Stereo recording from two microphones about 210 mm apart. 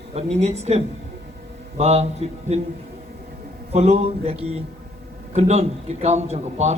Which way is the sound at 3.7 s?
30° right (ahead or behind).